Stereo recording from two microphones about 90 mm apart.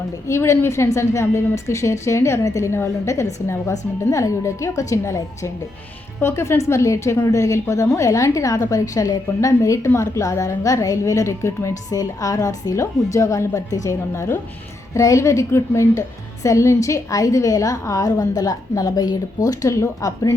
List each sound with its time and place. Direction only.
0.3 s a woman's voice: 30° left (ahead or behind)